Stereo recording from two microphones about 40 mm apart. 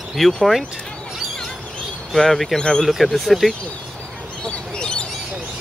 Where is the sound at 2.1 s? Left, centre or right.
Centre.